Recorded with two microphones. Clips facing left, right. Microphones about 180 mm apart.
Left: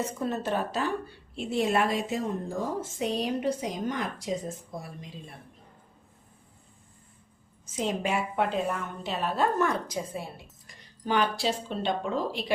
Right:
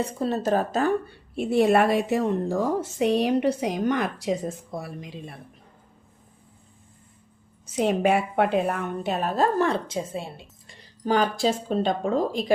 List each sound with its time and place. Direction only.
0.0 s a woman's voice: 35° right (ahead or behind)
1.4 s a woman's voice: 60° right (ahead or behind)
7.6 s a woman's voice: 65° right (ahead or behind); by 10.8 s 25° right (ahead or behind)
11.0 s a woman's voice: 40° right (ahead or behind)